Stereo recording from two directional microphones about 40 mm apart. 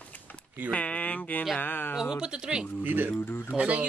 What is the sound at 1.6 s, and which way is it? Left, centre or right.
Speech, left.